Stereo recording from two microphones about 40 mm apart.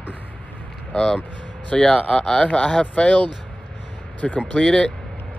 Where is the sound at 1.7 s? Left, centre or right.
Centre.